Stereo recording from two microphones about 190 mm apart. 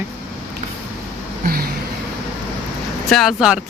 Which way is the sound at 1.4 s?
50° right (ahead or behind).